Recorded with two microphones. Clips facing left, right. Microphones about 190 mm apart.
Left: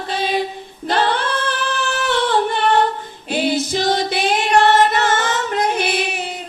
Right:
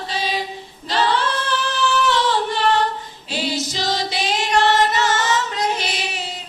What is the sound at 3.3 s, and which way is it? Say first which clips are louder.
Music: left 6 dB; 55° left (ahead or behind).